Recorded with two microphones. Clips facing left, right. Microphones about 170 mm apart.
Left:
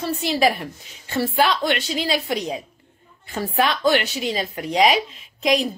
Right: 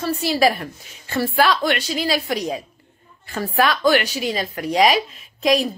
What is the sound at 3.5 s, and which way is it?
A woman's voice, 25° left (ahead or behind).